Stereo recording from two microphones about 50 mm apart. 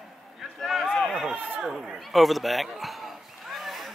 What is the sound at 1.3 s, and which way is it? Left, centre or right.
Run, right.